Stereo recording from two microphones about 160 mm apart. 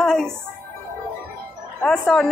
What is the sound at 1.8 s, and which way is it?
Female singing, 5° left (ahead or behind).